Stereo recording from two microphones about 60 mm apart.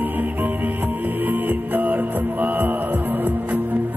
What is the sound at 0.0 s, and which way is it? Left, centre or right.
Music, right.